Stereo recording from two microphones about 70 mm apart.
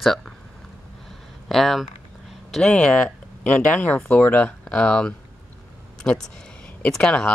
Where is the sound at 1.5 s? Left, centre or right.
Centre.